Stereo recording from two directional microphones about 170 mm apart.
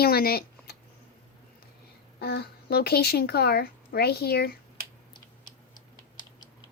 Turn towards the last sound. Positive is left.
turn(degrees=25)  # may be behind; listen again after turning